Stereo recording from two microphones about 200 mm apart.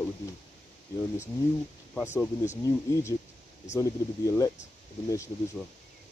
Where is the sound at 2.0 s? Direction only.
10° left (ahead or behind).